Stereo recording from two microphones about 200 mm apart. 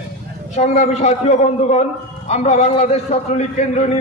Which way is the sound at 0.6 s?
35° left (ahead or behind).